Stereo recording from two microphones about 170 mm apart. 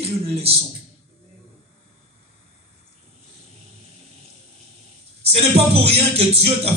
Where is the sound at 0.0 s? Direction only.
35° right (ahead or behind).